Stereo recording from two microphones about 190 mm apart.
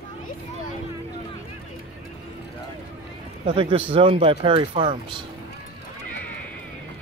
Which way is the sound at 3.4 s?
30° right (ahead or behind).